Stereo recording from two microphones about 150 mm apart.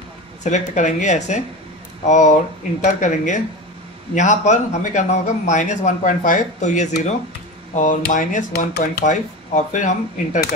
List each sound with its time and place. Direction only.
0.4 s a man's voice: 55° left (ahead or behind); by 9.0 s 90° left
9.0 s speech: 55° left (ahead or behind)